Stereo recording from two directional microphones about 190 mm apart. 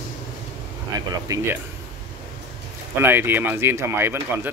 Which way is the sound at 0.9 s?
15° right (ahead or behind).